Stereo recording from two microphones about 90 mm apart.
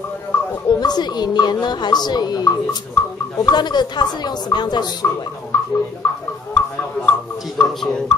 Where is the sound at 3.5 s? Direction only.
50° left (ahead or behind).